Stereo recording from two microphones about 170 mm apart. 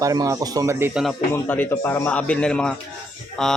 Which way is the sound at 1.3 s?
10° left (ahead or behind).